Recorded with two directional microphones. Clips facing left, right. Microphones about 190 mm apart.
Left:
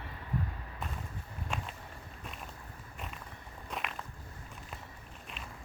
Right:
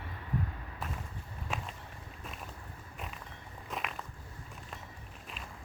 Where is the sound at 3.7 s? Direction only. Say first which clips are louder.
Right 1 dB; centre (ahead or behind).